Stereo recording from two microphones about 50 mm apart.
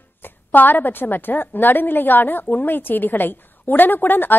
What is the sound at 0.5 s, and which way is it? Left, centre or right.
A woman's voice, left.